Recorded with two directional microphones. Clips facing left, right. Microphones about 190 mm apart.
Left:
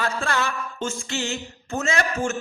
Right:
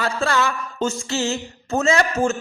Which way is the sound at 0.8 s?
40° right (ahead or behind).